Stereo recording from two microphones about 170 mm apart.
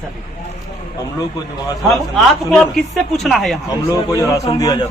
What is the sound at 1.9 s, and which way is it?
A man's voice, centre (ahead or behind).